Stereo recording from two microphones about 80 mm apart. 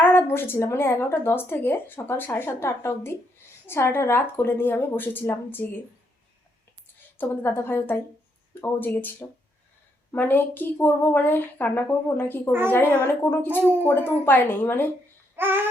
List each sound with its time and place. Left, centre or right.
0.0 s speech: left
7.2 s speech: left
15.4 s babbling: right